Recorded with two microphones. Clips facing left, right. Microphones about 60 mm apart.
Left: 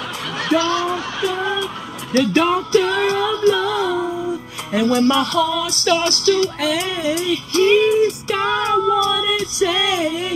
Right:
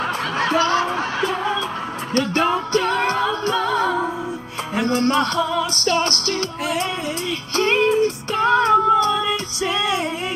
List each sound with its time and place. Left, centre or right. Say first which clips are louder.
0.4 s music: left 1 dB; right